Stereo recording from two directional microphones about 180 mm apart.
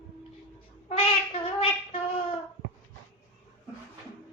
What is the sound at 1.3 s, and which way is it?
Child singing, 30° left (ahead or behind).